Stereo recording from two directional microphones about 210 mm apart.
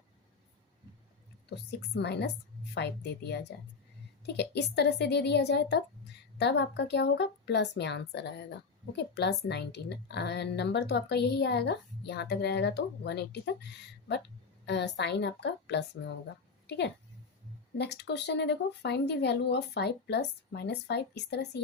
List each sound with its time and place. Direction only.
2.0 s a woman's voice: 55° left (ahead or behind)
14.7 s a woman's voice: 55° left (ahead or behind)